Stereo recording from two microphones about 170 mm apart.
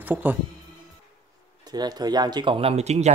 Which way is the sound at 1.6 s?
25° right (ahead or behind).